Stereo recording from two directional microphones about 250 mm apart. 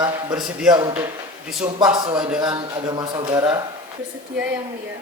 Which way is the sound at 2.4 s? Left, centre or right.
Centre.